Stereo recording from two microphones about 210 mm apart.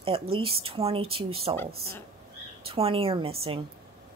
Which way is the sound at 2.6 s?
25° right (ahead or behind).